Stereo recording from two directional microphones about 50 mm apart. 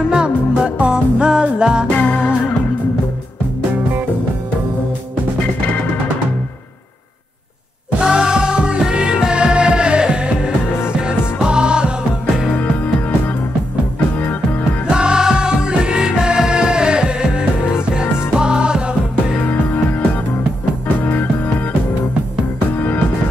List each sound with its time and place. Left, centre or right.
0.1 s music: centre
2.0 s music: left
8.0 s music: centre
12.4 s music: left
14.9 s music: centre
19.4 s music: left
21.0 s music: left